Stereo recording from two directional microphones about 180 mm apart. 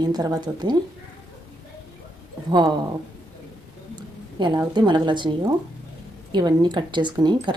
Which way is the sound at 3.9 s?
25° right (ahead or behind).